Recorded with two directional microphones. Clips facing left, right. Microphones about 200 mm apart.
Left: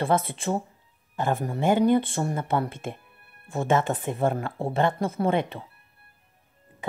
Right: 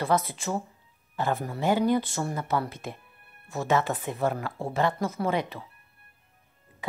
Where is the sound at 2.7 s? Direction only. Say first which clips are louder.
Left 3 dB; 50° left (ahead or behind).